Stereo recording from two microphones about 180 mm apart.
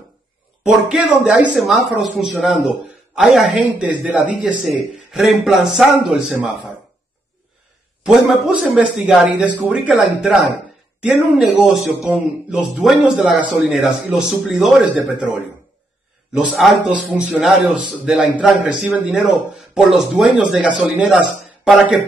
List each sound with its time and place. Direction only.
0.7 s a man's voice: 5° right (ahead or behind)
8.0 s a man's voice: 5° right (ahead or behind)